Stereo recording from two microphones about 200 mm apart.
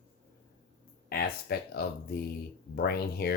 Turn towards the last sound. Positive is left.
turn(degrees=50)  # may be behind; listen again after turning